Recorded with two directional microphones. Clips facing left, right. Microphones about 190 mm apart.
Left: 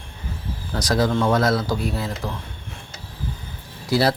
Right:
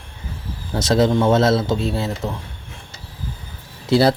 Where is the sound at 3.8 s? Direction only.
25° right (ahead or behind).